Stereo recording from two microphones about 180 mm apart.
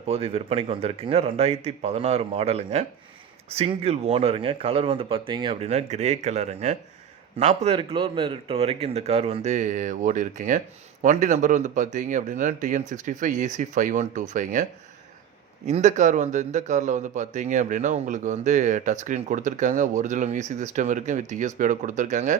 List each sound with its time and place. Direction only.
0.0 s a man's voice: 35° right (ahead or behind)